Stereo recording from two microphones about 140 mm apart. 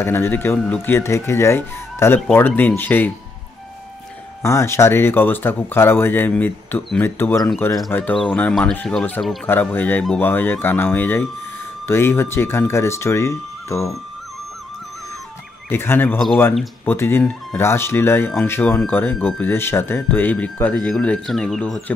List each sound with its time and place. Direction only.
0.0 s speech: 15° left (ahead or behind)
4.4 s speech: 20° left (ahead or behind)
15.7 s speech: 15° left (ahead or behind)